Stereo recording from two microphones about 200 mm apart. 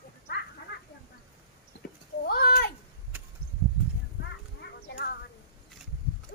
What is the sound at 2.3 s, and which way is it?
Speech, 50° left (ahead or behind).